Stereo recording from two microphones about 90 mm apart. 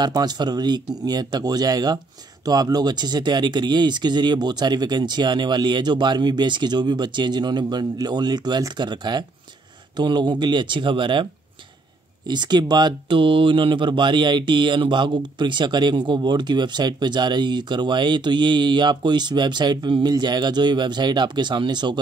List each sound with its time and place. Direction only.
0.0 s speech: 50° right (ahead or behind)
12.3 s speech: 55° right (ahead or behind)